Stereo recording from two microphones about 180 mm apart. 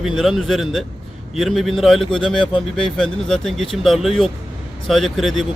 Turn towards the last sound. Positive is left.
turn(degrees=0)  # may be behind; listen again after turning